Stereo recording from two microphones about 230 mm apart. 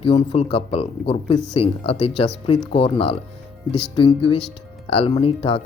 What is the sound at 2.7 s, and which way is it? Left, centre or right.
Speech, left.